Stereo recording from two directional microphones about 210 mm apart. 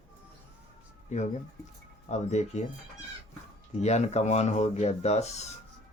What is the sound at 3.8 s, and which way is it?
Speech, 30° left (ahead or behind).